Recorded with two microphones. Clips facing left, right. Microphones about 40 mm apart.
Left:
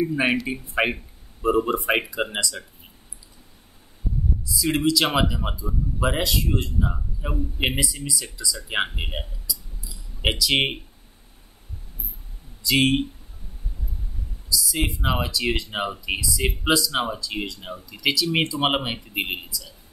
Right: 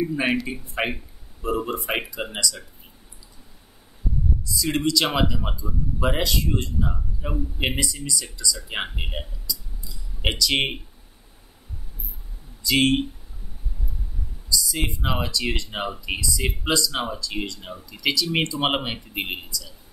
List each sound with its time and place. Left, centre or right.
0.8 s speech: centre
1.4 s speech: left
4.5 s speech: centre
12.6 s speech: centre
14.6 s speech: centre